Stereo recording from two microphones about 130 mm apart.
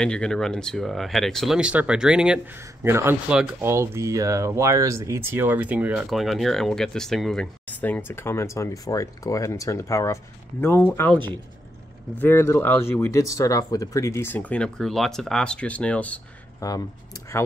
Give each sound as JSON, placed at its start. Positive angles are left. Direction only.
{"t": 0.0, "sound": "speech", "side_deg": 5}
{"t": 1.6, "sound": "speech", "side_deg": -10}
{"t": 2.8, "sound": "speech", "side_deg": -20}
{"t": 12.2, "sound": "speech", "side_deg": 20}
{"t": 16.6, "sound": "speech", "side_deg": 25}